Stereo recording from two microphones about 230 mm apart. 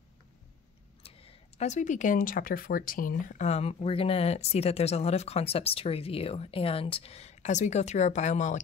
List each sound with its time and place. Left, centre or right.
1.0 s speech: left